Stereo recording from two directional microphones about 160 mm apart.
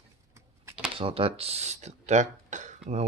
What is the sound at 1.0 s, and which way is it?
Speech, 35° right (ahead or behind).